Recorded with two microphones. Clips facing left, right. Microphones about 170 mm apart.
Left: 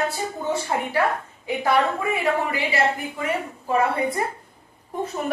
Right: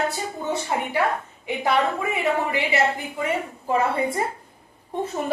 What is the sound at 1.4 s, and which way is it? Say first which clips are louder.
A woman's voice: left 1 dB; 20° right (ahead or behind).